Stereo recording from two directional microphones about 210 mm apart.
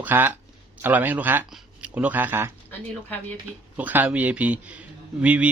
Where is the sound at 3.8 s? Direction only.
10° right (ahead or behind).